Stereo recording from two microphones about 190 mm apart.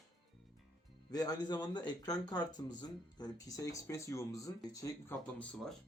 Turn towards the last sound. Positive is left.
turn(degrees=5)  # may be behind; listen again after turning